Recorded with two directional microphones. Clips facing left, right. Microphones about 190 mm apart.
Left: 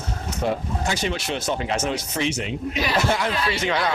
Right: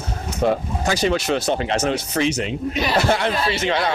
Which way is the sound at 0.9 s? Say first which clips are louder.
Right 7 dB; 40° right (ahead or behind).